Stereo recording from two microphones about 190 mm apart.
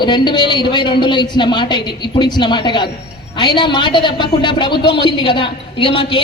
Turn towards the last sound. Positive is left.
turn(degrees=25)  # may be behind; listen again after turning